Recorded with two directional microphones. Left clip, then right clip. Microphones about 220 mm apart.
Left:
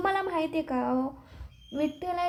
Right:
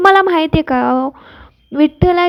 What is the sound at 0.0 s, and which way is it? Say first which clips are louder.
A woman's voice: right 18 dB; 35° right (ahead or behind).